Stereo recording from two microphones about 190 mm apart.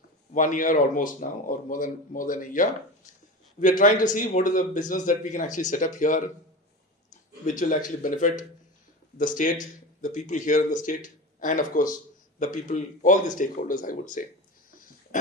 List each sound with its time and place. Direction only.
0.3 s a man's voice: 45° left (ahead or behind)
8.0 s a man's voice: 45° left (ahead or behind)
15.1 s a sound: 40° left (ahead or behind)